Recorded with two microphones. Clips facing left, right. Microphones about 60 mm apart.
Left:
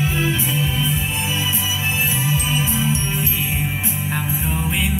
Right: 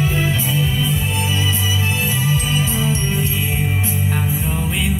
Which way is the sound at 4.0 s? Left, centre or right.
Left.